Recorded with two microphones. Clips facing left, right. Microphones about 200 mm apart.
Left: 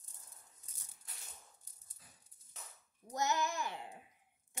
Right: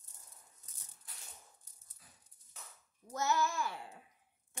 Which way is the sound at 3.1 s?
20° left (ahead or behind).